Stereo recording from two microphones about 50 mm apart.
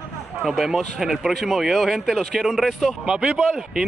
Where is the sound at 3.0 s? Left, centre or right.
Centre.